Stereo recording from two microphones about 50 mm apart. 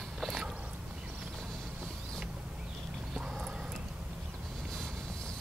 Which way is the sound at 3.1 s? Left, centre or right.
Centre.